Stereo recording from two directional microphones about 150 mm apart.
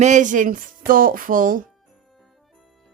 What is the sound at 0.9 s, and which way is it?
Speech, 70° right (ahead or behind).